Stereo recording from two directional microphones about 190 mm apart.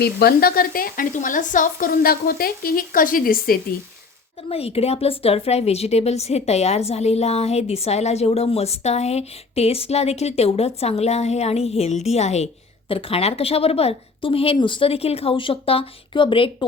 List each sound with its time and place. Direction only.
0.0 s a woman's voice: 55° left (ahead or behind)
4.4 s a woman's voice: 30° left (ahead or behind)